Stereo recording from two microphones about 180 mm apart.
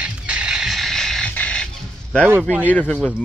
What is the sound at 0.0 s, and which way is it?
Music, 5° right (ahead or behind).